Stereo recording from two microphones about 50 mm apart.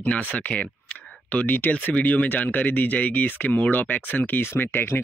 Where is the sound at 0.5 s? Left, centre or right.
Left.